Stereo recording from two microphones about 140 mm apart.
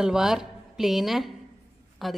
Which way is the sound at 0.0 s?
5° right (ahead or behind).